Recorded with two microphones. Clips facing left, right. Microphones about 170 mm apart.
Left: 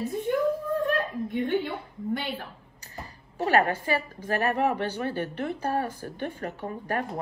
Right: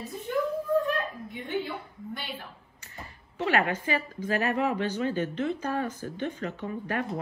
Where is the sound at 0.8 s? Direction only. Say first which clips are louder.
Left 4 dB; 65° left (ahead or behind).